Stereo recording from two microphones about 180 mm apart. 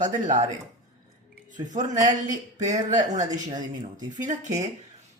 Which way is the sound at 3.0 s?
45° right (ahead or behind).